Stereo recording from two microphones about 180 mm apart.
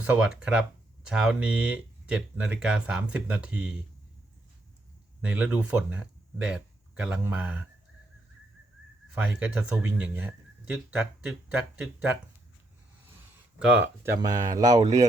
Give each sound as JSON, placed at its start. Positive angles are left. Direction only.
{"t": 0.0, "sound": "speech", "side_deg": -5}
{"t": 5.2, "sound": "speech", "side_deg": -10}
{"t": 9.1, "sound": "speech", "side_deg": -5}
{"t": 13.6, "sound": "speech", "side_deg": -10}